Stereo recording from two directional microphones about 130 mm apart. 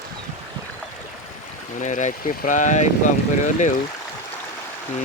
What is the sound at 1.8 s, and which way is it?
Speech, 70° left (ahead or behind).